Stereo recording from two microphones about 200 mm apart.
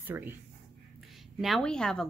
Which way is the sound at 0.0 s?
10° right (ahead or behind).